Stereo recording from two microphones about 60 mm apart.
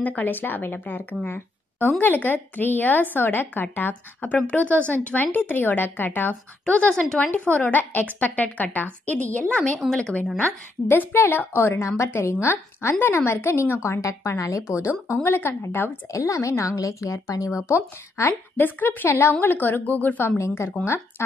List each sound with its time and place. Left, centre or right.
0.0 s a woman's voice: left
6.6 s a woman's voice: centre
10.9 s a woman's voice: left
15.2 s a woman's voice: left
16.1 s a woman's voice: left
20.3 s a woman's voice: left